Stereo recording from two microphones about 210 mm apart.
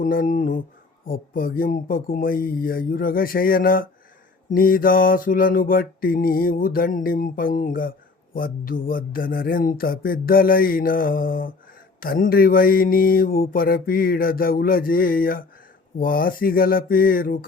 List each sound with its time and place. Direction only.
0.0 s mantra: 40° left (ahead or behind)